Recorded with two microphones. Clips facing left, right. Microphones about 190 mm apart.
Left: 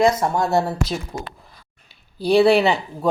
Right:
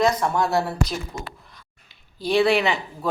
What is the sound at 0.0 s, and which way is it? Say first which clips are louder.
Speech: left 3 dB; 25° left (ahead or behind).